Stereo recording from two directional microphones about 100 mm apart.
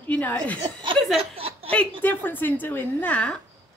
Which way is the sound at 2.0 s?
20° left (ahead or behind).